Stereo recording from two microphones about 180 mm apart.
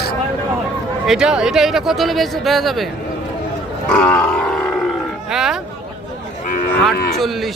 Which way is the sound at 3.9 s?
10° left (ahead or behind).